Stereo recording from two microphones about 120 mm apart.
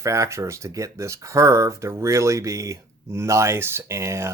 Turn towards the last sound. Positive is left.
turn(degrees=-25)  # may be behind; listen again after turning